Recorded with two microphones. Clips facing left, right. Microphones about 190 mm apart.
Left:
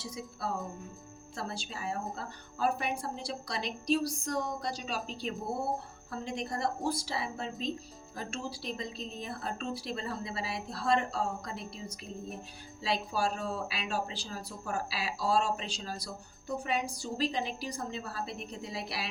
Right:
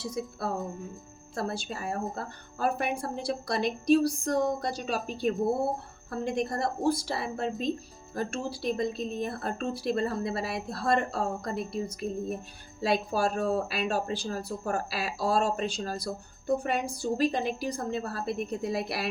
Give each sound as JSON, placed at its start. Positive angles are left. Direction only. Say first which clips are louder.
{"t": 0.0, "sound": "speech", "louder": "right 6 dB", "side_deg": -55}